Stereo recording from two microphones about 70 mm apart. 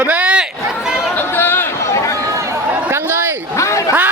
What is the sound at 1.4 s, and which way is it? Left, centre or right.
Chatter, left.